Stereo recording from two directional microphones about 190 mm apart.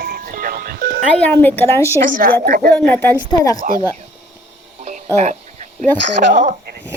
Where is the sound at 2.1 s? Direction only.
50° right (ahead or behind).